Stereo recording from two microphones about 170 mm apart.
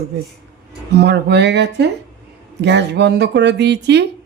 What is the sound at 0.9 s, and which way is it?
Speech, 80° right.